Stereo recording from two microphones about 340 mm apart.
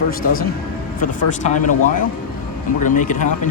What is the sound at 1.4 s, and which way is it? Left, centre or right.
Speech, left.